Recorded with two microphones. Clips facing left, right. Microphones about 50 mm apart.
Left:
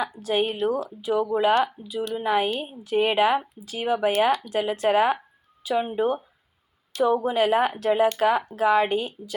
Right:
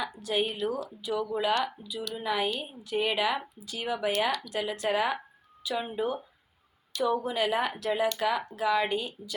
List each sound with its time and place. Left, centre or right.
0.0 s speech: left
6.9 s speech: left